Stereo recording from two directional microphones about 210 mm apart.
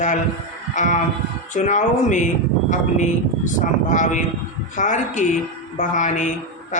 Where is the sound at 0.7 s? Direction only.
35° left (ahead or behind).